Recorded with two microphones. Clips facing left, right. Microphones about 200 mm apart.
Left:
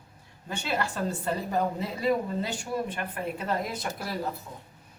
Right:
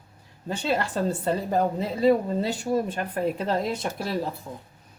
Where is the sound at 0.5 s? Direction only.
30° right (ahead or behind).